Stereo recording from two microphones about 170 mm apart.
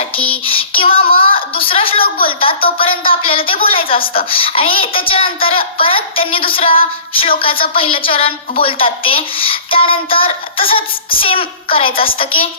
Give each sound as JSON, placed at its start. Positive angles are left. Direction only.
{"t": 0.4, "sound": "child singing", "side_deg": 30}
{"t": 1.1, "sound": "a sound", "side_deg": 30}
{"t": 2.2, "sound": "a woman's voice", "side_deg": 30}